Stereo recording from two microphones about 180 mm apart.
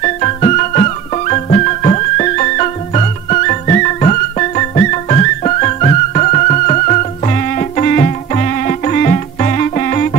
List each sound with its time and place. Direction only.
0.0 s music: 35° left (ahead or behind)